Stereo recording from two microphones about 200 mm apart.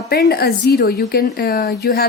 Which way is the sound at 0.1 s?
50° left (ahead or behind).